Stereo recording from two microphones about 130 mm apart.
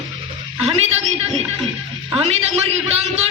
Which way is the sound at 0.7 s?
55° right (ahead or behind).